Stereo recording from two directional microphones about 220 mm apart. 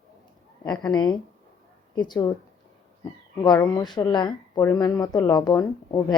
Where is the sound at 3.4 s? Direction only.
20° left (ahead or behind).